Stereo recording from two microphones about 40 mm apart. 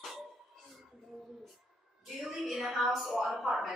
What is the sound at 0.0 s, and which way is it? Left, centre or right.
Cough, centre.